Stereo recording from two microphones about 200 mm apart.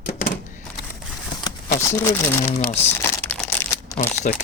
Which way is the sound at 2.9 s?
10° left (ahead or behind).